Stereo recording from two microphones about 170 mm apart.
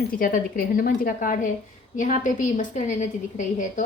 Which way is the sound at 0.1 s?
55° left (ahead or behind).